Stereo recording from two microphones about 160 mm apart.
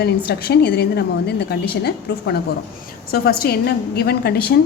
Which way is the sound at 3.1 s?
70° left (ahead or behind).